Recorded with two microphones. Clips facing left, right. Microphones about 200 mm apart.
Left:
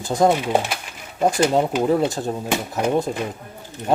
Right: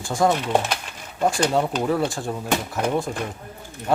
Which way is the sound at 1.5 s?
20° left (ahead or behind).